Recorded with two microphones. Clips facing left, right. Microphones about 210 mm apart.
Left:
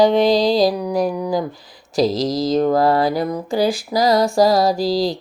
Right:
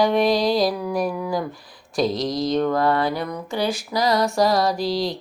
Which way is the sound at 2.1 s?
90° left.